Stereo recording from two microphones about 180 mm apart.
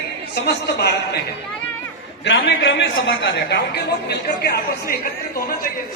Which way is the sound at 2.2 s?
90° left.